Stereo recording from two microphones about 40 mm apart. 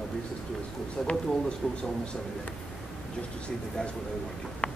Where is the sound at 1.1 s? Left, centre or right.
Centre.